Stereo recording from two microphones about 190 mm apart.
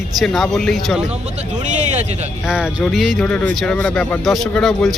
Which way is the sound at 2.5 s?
Centre (ahead or behind).